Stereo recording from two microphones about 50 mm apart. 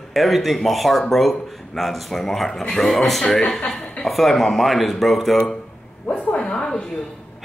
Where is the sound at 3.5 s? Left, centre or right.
Left.